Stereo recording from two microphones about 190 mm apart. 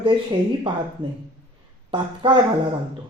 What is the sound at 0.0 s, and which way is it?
Speech, 25° right (ahead or behind).